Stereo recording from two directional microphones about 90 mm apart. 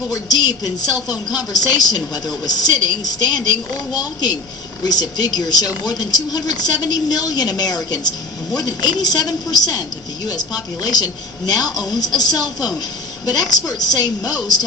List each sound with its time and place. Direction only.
0.1 s a woman's voice: 50° left (ahead or behind)